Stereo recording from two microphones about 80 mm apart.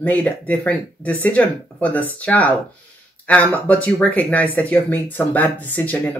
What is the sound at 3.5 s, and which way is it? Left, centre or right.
Speech, centre.